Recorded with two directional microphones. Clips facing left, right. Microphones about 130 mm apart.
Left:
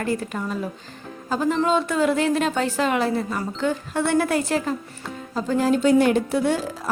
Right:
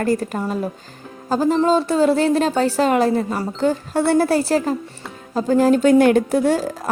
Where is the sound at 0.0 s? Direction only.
40° right (ahead or behind).